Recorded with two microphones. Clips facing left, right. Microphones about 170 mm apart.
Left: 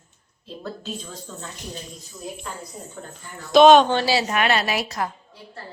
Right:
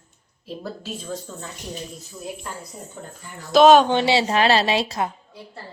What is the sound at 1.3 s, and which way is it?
Speech, 5° right (ahead or behind).